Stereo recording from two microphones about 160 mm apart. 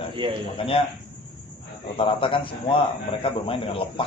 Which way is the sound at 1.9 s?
35° left (ahead or behind).